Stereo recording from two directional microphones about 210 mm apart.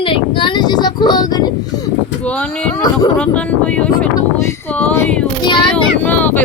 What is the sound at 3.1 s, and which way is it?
Speech, 5° left (ahead or behind).